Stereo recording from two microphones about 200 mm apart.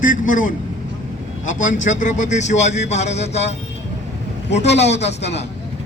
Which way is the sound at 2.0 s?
35° left (ahead or behind).